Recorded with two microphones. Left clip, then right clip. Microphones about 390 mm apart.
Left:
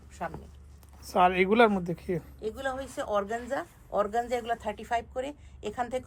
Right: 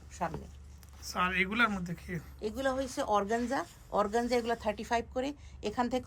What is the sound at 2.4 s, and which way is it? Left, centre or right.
Speech, centre.